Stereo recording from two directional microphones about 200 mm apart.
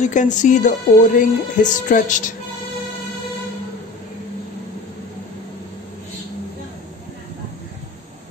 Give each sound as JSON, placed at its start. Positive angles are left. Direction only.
{"t": 0.0, "sound": "music", "side_deg": 40}